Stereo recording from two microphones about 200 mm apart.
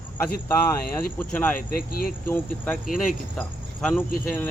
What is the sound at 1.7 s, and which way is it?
Speech, 45° left (ahead or behind).